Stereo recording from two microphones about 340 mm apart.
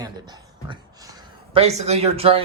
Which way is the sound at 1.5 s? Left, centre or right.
Centre.